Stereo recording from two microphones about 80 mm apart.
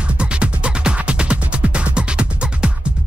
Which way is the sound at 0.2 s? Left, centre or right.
Centre.